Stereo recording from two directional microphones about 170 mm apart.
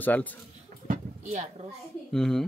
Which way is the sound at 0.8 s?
45° right (ahead or behind).